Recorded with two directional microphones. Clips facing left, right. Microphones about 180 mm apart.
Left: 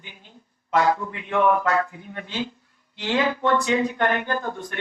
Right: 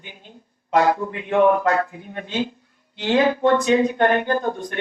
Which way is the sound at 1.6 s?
35° right (ahead or behind).